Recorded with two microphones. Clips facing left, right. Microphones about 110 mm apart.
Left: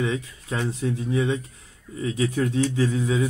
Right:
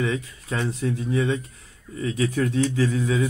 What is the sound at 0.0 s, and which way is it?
Speech, 20° left (ahead or behind).